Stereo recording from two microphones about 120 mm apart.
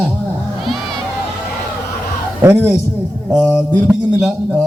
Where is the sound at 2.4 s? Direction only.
20° right (ahead or behind).